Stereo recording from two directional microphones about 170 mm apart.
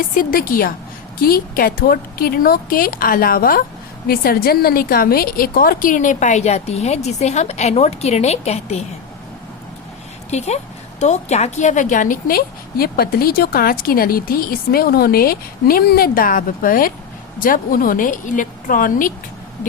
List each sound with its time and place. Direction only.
0.2 s a woman's voice: 55° left (ahead or behind); by 8.8 s 40° left (ahead or behind)
10.3 s a woman's voice: 40° left (ahead or behind)